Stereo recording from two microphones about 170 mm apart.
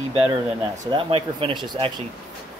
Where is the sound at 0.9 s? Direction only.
35° right (ahead or behind).